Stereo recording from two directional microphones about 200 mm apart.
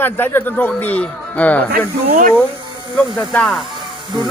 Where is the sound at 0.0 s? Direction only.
10° left (ahead or behind).